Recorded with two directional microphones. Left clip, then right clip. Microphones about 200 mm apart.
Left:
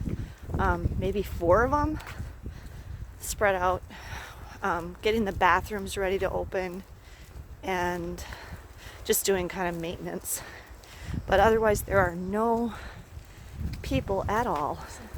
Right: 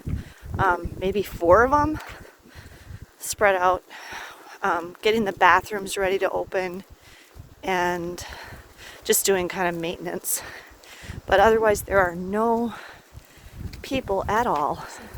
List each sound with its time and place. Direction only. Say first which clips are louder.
0.2 s speech: right 7 dB; 30° right (ahead or behind)
3.2 s speech: right 6 dB; 30° right (ahead or behind)